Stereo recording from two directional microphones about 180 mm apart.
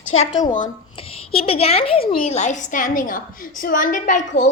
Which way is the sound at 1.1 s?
30° left (ahead or behind).